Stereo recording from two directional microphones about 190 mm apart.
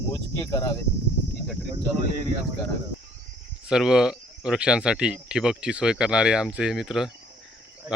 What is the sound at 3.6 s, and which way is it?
Speech, 5° right (ahead or behind).